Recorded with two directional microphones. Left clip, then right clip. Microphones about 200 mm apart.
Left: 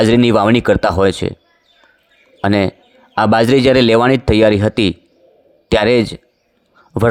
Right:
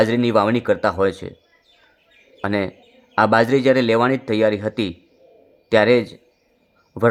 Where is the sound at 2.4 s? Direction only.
35° left (ahead or behind).